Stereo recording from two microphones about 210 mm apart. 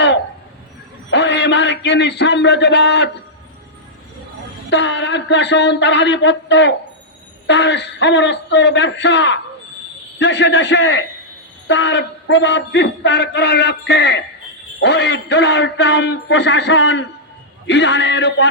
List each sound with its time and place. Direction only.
1.1 s a man's voice: 55° left (ahead or behind)
4.7 s a man's voice: 55° left (ahead or behind)